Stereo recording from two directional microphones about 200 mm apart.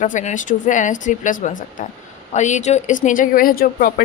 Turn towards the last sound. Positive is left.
turn(degrees=45)  # may be behind; listen again after turning